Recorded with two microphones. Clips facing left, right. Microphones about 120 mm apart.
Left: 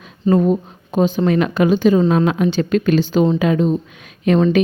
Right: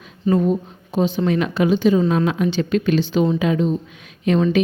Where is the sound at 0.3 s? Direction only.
45° left (ahead or behind).